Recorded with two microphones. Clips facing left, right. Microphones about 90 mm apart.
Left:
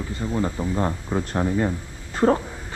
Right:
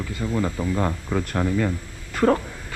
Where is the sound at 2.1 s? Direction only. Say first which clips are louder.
Even; 30° left (ahead or behind).